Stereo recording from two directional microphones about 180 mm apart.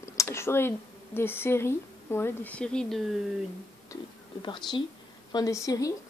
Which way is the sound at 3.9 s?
25° left (ahead or behind).